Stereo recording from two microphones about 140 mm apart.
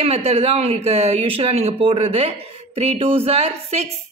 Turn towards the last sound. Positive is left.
turn(degrees=-50)  # may be behind; listen again after turning